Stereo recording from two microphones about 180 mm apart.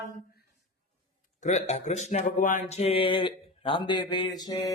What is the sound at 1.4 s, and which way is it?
Speech, 40° left (ahead or behind).